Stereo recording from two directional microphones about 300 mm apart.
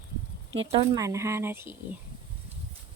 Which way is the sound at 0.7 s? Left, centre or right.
Centre.